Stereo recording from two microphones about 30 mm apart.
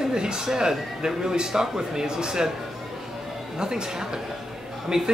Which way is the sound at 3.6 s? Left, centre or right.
Right.